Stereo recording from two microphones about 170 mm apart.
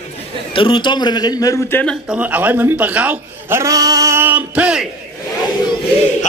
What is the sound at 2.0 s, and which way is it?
A man's voice, 5° right (ahead or behind).